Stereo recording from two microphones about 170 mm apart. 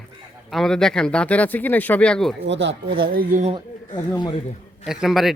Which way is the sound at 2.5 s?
90° right.